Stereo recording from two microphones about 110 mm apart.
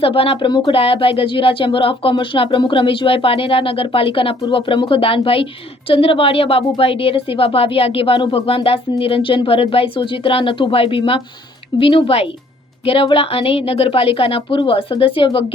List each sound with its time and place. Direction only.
0.0 s speech: 60° left (ahead or behind)
0.8 s speech: 60° left (ahead or behind)